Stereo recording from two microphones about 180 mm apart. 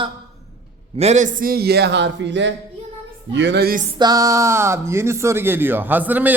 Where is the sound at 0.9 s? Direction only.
35° right (ahead or behind); by 2.5 s 80° right.